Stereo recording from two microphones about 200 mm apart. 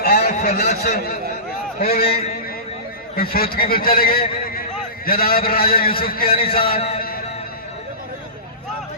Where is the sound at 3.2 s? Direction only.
45° left (ahead or behind).